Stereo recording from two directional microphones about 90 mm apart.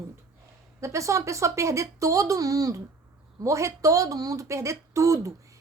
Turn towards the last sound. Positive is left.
turn(degrees=-35)  # may be behind; listen again after turning